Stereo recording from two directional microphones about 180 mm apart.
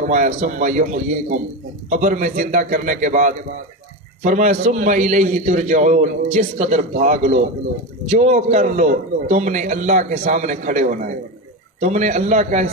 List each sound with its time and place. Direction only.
0.0 s a man's voice: 45° right (ahead or behind)